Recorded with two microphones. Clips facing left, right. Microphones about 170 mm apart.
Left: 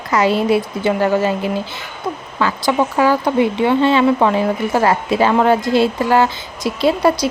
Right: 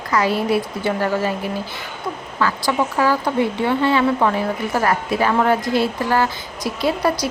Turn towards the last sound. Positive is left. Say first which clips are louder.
# left 5 dB
turn(degrees=25)  # may be behind; listen again after turning